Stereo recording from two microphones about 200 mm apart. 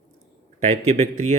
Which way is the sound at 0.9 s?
35° right (ahead or behind).